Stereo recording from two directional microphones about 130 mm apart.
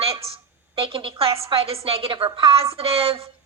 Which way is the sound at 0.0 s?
50° right (ahead or behind).